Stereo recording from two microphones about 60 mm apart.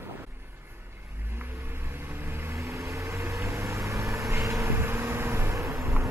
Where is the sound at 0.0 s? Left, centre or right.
Right.